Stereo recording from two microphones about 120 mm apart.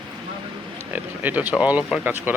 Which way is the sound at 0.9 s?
15° right (ahead or behind).